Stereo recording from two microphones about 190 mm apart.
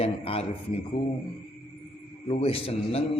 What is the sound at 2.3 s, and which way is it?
Speech, 30° left (ahead or behind).